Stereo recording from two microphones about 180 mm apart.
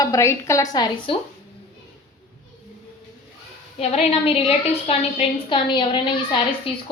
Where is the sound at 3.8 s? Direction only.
35° left (ahead or behind).